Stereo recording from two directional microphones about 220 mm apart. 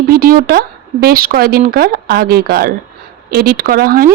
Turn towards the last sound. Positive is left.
turn(degrees=-40)  # may be behind; listen again after turning